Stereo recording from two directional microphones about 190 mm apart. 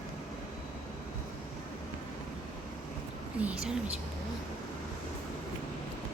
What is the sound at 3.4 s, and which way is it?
Speech, 5° right (ahead or behind).